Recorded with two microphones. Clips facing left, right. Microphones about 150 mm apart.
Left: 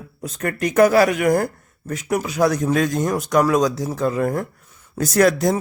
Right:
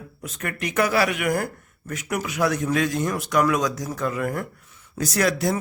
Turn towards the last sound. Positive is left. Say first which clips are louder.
# left 6 dB
turn(degrees=45)  # may be behind; listen again after turning